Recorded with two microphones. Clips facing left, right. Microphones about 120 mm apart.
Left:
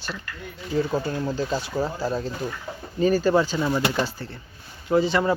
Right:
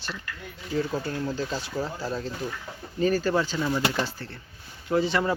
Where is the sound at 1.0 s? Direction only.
15° left (ahead or behind).